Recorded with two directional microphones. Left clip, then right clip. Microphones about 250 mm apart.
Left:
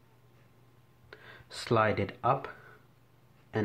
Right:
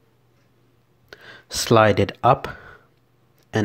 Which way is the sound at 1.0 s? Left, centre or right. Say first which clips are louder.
Right 9 dB; right.